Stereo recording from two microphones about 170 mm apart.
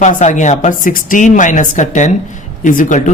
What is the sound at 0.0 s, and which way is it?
A woman's voice, 45° left (ahead or behind).